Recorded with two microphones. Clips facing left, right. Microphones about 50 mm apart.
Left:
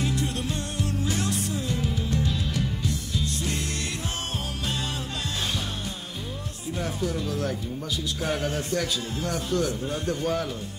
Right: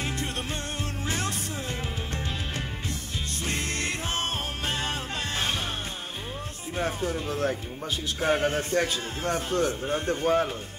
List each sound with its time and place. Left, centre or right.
1.0 s music: right
6.8 s a man's voice: right